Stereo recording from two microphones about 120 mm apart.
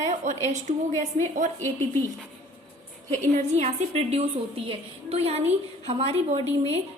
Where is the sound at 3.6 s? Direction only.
55° right (ahead or behind).